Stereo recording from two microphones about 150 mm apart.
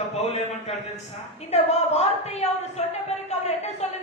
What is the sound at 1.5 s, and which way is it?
A woman's voice, 45° left (ahead or behind).